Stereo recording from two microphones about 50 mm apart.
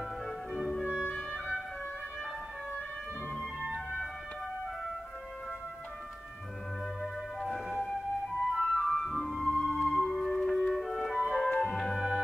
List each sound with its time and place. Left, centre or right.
0.5 s music: centre
7.0 s music: centre
11.4 s music: left
11.7 s music: centre